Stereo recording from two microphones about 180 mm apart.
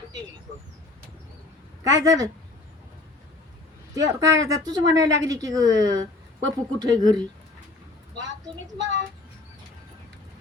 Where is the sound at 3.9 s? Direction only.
20° right (ahead or behind).